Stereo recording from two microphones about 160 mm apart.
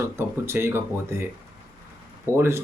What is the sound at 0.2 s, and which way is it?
Speech, 15° right (ahead or behind).